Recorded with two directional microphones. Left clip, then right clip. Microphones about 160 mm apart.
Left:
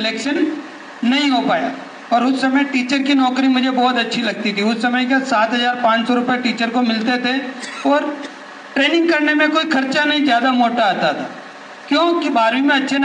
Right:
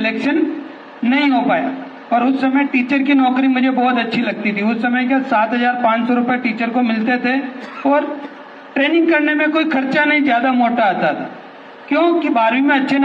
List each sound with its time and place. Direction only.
1.0 s a man's voice: 5° right (ahead or behind)